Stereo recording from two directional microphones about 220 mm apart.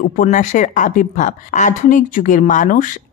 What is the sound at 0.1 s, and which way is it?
A woman's voice, 35° left (ahead or behind).